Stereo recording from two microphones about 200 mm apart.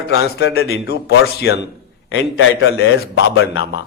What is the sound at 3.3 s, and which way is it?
Speech, 55° left (ahead or behind).